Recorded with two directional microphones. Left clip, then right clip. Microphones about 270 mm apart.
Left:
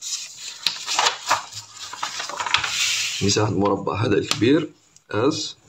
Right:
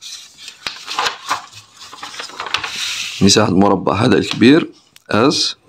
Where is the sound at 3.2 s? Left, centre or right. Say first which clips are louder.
Right 11 dB; right.